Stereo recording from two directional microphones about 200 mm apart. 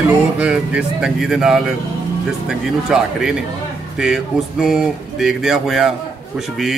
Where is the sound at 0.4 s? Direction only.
5° right (ahead or behind).